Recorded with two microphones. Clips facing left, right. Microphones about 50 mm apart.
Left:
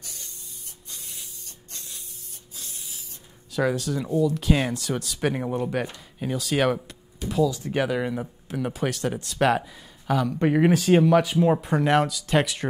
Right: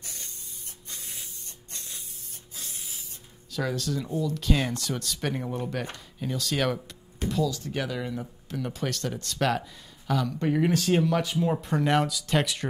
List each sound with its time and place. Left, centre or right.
0.0 s spray: right
2.5 s spray: right
3.5 s speech: centre
10.4 s speech: left
10.9 s speech: centre
11.6 s speech: centre